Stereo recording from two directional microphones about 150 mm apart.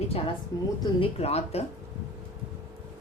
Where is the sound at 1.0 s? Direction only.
45° left (ahead or behind).